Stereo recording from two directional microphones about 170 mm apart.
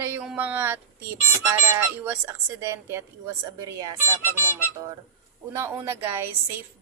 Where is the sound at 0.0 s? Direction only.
10° right (ahead or behind).